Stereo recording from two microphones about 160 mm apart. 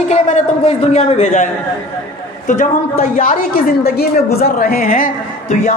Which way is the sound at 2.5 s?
55° left (ahead or behind).